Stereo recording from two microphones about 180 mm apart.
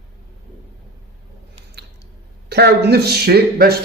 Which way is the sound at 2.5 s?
65° right (ahead or behind).